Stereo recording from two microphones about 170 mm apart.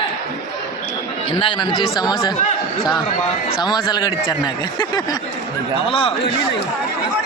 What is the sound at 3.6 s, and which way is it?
Speech, 25° left (ahead or behind).